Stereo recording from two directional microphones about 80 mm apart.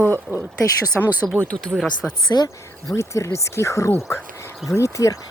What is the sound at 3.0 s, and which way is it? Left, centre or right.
Speech, left.